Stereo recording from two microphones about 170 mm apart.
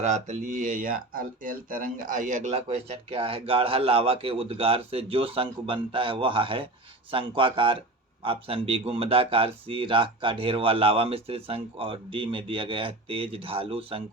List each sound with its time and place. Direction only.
0.0 s speech: 45° right (ahead or behind)